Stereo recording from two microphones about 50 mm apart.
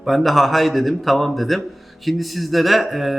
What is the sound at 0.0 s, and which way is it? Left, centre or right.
Speech, centre.